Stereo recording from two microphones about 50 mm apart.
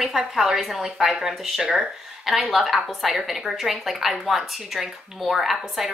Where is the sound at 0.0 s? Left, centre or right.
Centre.